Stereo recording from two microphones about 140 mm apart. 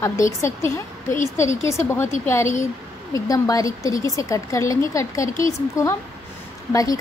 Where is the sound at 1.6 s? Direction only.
20° left (ahead or behind).